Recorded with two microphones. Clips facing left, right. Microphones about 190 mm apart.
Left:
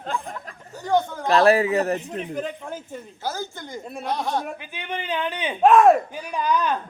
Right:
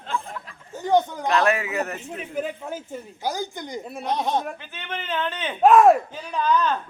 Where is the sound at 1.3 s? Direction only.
35° left (ahead or behind).